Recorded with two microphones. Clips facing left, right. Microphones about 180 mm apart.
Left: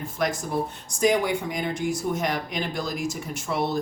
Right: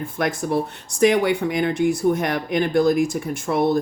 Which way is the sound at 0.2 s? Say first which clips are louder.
Right 4 dB; 65° right (ahead or behind).